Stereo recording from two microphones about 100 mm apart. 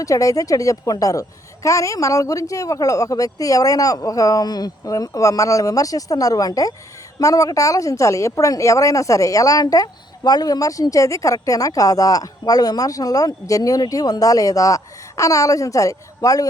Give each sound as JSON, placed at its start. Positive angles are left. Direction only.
{"t": 0.0, "sound": "a woman's voice", "side_deg": 35}